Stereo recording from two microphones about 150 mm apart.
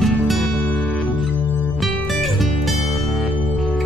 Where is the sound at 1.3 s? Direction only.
10° right (ahead or behind).